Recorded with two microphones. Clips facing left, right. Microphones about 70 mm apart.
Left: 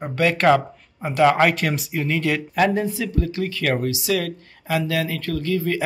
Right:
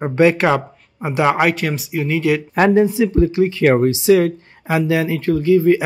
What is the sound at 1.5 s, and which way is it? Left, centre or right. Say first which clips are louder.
Speech: right 3 dB; centre.